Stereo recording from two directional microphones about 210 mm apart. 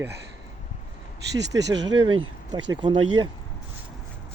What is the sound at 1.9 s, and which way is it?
Speech, 20° right (ahead or behind).